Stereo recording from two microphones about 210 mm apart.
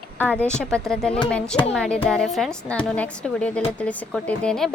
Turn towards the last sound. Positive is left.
turn(degrees=5)  # may be behind; listen again after turning